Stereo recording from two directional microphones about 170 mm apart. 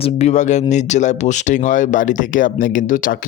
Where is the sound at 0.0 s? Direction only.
40° left (ahead or behind).